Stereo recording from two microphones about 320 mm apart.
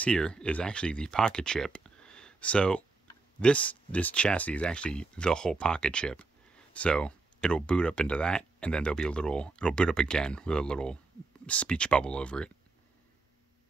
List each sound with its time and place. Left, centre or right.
0.0 s speech: centre